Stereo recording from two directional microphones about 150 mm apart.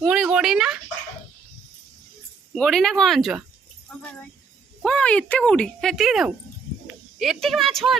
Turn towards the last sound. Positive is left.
turn(degrees=0)  # may be behind; listen again after turning